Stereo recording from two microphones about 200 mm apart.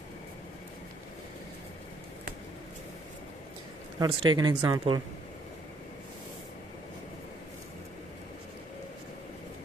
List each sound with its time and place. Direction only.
4.0 s speech: 20° right (ahead or behind)